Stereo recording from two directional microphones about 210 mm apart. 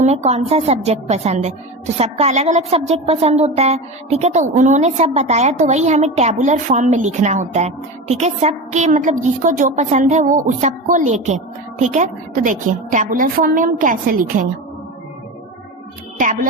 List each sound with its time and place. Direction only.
0.0 s a woman's voice: 30° right (ahead or behind)
16.1 s a woman's voice: 40° right (ahead or behind)